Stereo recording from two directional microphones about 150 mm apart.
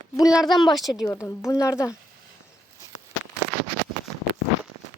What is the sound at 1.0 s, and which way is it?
Speech, 15° left (ahead or behind).